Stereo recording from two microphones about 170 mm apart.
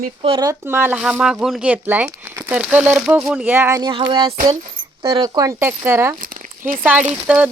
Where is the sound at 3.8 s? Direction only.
30° right (ahead or behind).